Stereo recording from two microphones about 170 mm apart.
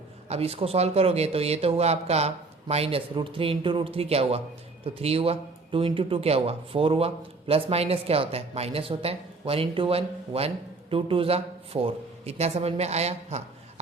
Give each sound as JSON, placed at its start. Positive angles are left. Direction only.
{"t": 0.3, "sound": "speech", "side_deg": -35}